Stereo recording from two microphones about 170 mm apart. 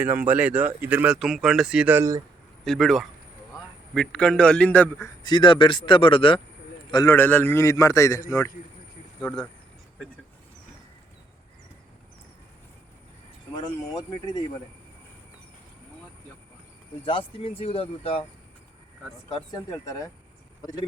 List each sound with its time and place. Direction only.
0.0 s speech: 10° right (ahead or behind)
2.6 s a man's voice: centre (ahead or behind)
5.0 s speech: 25° left (ahead or behind)
6.9 s a man's voice: 15° left (ahead or behind)
9.2 s a man's voice: 5° left (ahead or behind)
13.9 s speech: 25° left (ahead or behind)
17.1 s speech: 35° left (ahead or behind)
19.3 s speech: 25° left (ahead or behind)